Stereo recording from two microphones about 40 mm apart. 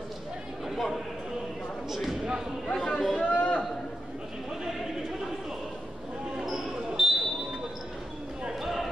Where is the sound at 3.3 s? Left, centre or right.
Left.